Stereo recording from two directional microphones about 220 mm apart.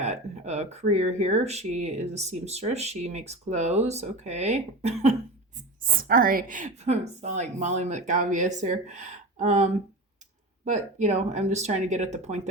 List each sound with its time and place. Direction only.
0.0 s speech: 30° right (ahead or behind)